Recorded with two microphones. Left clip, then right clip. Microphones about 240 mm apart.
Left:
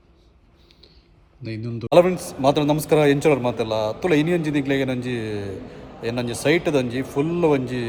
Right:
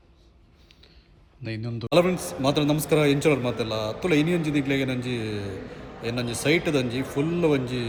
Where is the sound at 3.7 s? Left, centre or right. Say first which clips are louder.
Left 6 dB; left.